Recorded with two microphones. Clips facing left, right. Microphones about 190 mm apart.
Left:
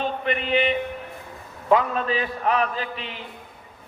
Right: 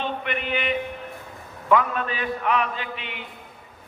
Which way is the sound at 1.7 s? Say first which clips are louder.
Left 2 dB; 30° left (ahead or behind).